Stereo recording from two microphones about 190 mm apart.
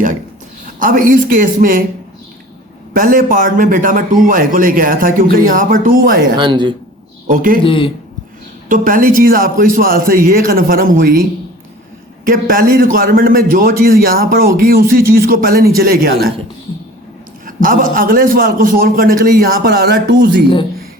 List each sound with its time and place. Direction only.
0.8 s a man's voice: 45° right (ahead or behind)
2.9 s a man's voice: 45° right (ahead or behind)
6.3 s speech: 25° right (ahead or behind)
7.3 s a man's voice: 45° right (ahead or behind)
7.6 s speech: 25° left (ahead or behind)
8.7 s a man's voice: 45° right (ahead or behind)
12.2 s a man's voice: 45° right (ahead or behind)
17.4 s a man's voice: 45° right (ahead or behind)